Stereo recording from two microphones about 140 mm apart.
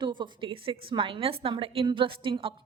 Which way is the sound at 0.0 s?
35° right (ahead or behind).